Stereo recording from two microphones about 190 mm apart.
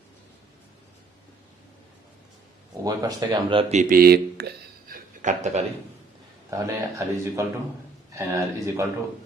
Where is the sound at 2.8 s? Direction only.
20° right (ahead or behind); by 5.4 s 45° right (ahead or behind).